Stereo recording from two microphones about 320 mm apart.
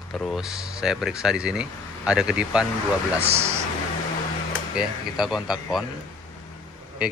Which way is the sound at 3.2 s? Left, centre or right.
Centre.